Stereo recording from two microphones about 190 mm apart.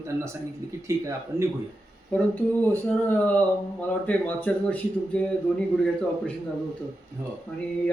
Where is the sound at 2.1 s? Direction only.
5° left (ahead or behind).